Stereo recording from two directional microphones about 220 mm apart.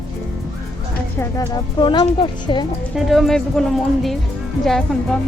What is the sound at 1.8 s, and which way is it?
Speech, 20° left (ahead or behind).